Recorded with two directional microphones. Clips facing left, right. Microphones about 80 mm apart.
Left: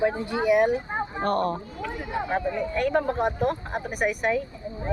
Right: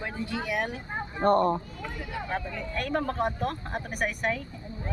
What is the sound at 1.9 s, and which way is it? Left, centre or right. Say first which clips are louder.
Speech: left 6 dB; left.